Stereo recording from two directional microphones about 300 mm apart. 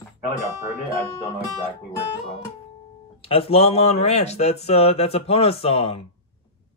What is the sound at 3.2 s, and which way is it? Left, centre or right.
Speech, centre.